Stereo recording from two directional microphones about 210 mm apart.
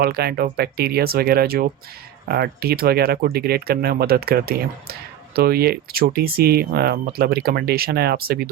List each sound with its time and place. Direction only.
0.0 s speech: 50° right (ahead or behind)